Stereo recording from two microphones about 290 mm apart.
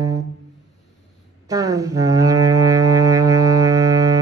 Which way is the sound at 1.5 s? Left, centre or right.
Centre.